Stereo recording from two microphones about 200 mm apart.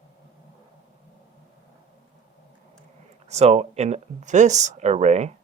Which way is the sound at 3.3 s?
35° right (ahead or behind).